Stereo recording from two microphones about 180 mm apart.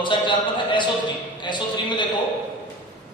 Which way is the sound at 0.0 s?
25° left (ahead or behind).